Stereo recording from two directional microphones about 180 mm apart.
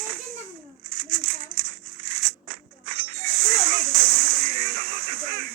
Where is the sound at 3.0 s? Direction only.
55° right (ahead or behind).